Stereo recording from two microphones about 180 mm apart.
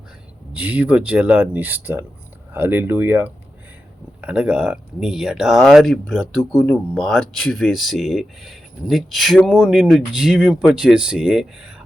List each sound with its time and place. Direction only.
0.5 s speech: 10° right (ahead or behind)